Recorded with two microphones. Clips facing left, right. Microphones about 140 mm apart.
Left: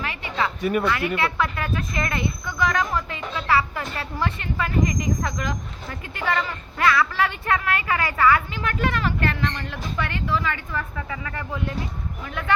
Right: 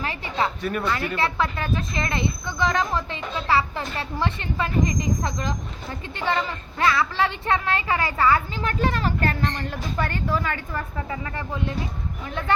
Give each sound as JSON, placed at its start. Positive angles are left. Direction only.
{"t": 0.0, "sound": "a sound", "side_deg": -30}
{"t": 0.6, "sound": "speech", "side_deg": 10}
{"t": 1.1, "sound": "speech", "side_deg": -30}